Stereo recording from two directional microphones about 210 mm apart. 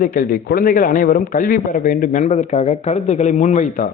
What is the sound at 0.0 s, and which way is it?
A man's voice, 40° left (ahead or behind).